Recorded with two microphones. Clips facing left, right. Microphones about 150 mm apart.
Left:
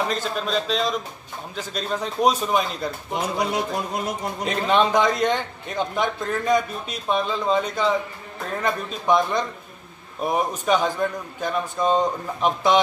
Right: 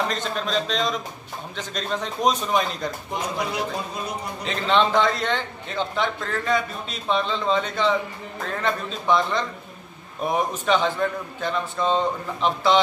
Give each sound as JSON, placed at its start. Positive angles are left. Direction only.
{"t": 0.1, "sound": "a man's voice", "side_deg": 5}
{"t": 3.9, "sound": "a man's voice", "side_deg": 90}
{"t": 4.5, "sound": "a man's voice", "side_deg": 10}